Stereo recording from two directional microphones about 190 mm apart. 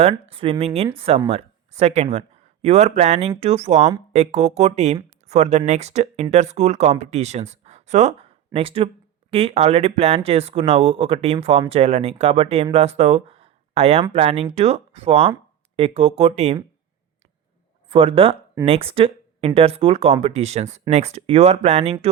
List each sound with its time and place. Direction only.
0.0 s speech: 30° right (ahead or behind)
17.8 s speech: 30° right (ahead or behind)